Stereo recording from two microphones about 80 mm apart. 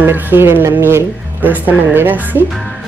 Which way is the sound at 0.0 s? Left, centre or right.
Right.